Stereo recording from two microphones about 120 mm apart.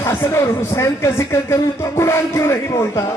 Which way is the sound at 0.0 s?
20° left (ahead or behind).